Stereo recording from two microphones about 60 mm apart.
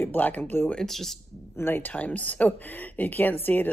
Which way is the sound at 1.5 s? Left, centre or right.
Left.